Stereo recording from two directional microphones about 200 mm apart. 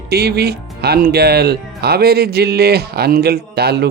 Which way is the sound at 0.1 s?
50° right (ahead or behind).